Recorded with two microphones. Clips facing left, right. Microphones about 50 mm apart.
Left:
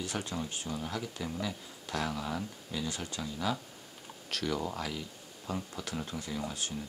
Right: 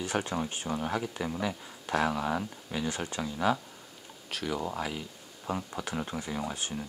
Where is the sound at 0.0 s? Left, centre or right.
Right.